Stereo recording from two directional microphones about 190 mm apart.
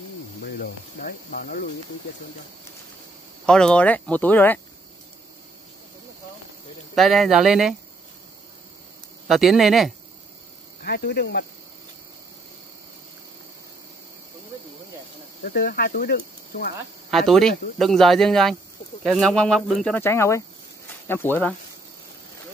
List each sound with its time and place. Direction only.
0.4 s speech: 50° left (ahead or behind)
3.4 s speech: 5° left (ahead or behind)
7.0 s speech: centre (ahead or behind)
9.3 s speech: centre (ahead or behind)
10.8 s speech: 55° left (ahead or behind)
15.4 s speech: 50° left (ahead or behind)
17.1 s speech: centre (ahead or behind)